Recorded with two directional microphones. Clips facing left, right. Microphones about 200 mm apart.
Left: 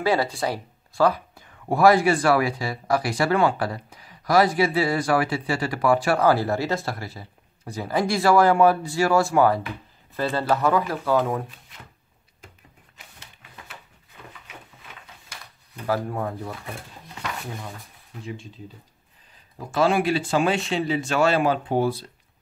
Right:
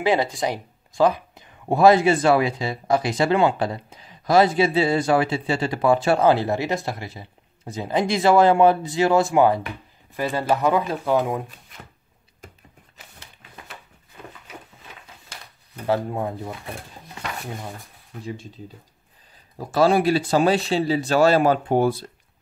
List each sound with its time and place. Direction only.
0.0 s speech: 20° right (ahead or behind)
15.9 s speech: 20° right (ahead or behind)
19.7 s speech: 35° right (ahead or behind)